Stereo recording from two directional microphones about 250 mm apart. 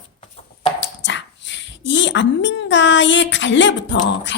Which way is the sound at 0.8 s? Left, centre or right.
Left.